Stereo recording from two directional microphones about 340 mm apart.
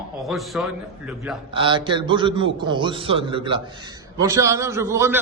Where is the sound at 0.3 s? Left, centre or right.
Centre.